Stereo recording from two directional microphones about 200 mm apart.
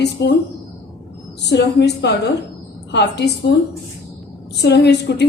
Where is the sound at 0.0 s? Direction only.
55° left (ahead or behind).